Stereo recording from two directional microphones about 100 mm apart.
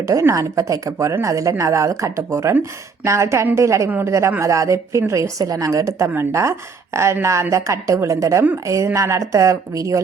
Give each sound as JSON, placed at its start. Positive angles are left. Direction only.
{"t": 0.1, "sound": "a woman's voice", "side_deg": -30}
{"t": 3.8, "sound": "a woman's voice", "side_deg": -20}